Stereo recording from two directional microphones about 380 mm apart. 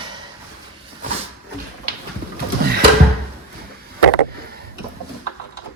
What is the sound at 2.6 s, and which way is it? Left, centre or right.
Drawer open or close, right.